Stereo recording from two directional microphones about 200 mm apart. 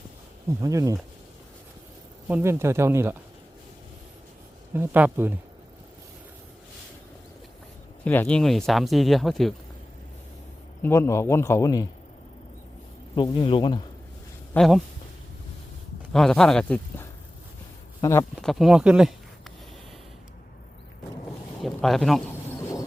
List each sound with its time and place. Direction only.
0.6 s speech: 15° right (ahead or behind)
2.2 s speech: 10° right (ahead or behind)
4.7 s speech: 10° right (ahead or behind)
8.0 s speech: 10° left (ahead or behind)
10.8 s speech: 15° left (ahead or behind)
13.1 s a man's voice: 20° left (ahead or behind)
14.5 s speech: centre (ahead or behind)
16.1 s speech: 5° left (ahead or behind)
18.3 s speech: centre (ahead or behind)
21.6 s a sound: centre (ahead or behind)